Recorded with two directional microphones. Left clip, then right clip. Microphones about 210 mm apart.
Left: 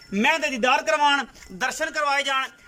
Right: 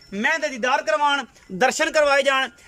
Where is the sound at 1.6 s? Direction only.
45° right (ahead or behind).